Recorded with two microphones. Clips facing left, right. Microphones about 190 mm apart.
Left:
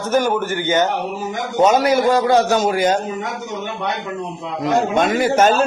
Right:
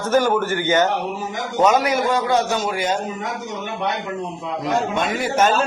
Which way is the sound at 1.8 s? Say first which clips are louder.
Left 5 dB; 35° left (ahead or behind).